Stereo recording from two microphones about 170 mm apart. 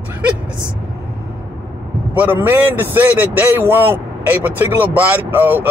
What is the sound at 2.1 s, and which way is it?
A man's voice, 10° right (ahead or behind).